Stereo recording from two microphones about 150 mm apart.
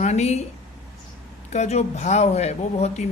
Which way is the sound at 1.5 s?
50° left (ahead or behind).